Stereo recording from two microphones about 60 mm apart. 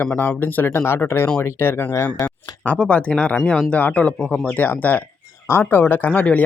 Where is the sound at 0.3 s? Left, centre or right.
Left.